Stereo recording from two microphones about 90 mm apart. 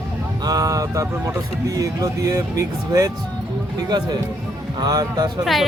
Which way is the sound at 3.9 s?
50° right (ahead or behind).